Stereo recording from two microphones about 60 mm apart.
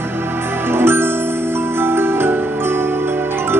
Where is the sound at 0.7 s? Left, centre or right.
Right.